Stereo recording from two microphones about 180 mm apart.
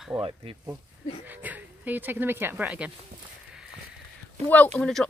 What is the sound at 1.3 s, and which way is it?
Speech, 10° right (ahead or behind).